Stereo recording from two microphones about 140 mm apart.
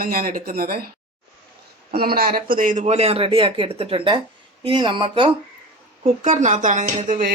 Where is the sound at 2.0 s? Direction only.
90° right; by 2.8 s 75° right (ahead or behind).